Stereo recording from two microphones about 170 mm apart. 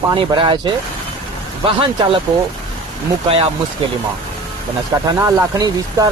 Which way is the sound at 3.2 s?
35° right (ahead or behind).